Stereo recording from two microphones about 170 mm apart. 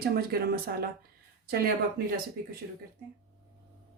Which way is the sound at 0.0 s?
65° right (ahead or behind).